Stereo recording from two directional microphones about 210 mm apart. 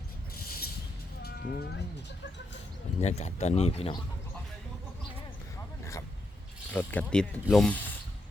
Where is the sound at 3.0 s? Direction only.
30° left (ahead or behind).